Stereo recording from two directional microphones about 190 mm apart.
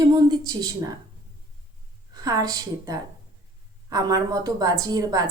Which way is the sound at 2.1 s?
20° right (ahead or behind).